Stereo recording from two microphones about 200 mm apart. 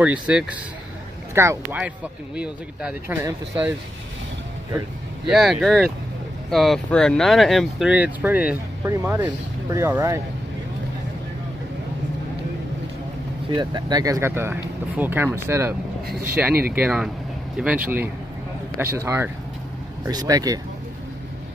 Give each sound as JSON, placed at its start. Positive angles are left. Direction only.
{"t": 0.0, "sound": "speech", "side_deg": -5}
{"t": 5.3, "sound": "speech", "side_deg": 0}
{"t": 13.6, "sound": "speech", "side_deg": -20}